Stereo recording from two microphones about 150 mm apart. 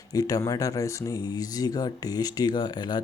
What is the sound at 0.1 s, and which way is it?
Speech, 25° left (ahead or behind).